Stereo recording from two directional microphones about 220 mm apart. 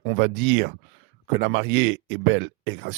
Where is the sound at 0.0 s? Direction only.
60° right (ahead or behind).